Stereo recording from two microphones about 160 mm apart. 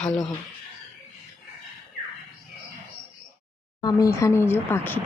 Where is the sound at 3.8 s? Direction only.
20° left (ahead or behind).